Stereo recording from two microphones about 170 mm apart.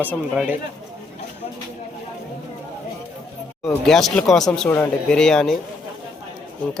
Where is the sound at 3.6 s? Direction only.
Centre (ahead or behind).